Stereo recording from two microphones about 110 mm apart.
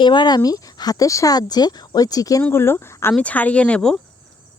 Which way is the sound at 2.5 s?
20° left (ahead or behind).